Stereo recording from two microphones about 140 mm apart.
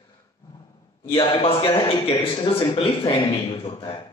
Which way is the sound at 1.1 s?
35° left (ahead or behind).